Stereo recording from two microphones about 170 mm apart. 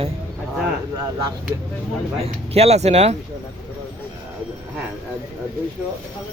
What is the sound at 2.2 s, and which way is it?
Speech, 35° right (ahead or behind).